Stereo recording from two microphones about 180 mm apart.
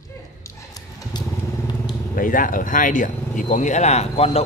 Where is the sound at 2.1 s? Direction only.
50° left (ahead or behind).